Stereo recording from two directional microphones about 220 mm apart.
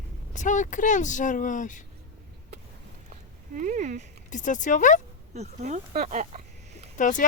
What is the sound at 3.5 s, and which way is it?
Speech, 35° right (ahead or behind).